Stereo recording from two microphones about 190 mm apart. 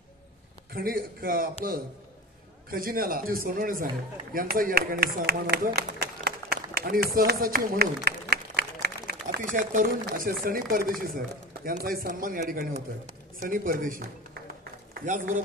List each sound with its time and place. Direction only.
0.7 s a man's voice: 50° right (ahead or behind)
2.7 s a man's voice: 50° right (ahead or behind)
5.8 s a sound: 55° right (ahead or behind)
8.8 s a man's voice: 55° right (ahead or behind)
15.0 s a man's voice: 45° right (ahead or behind)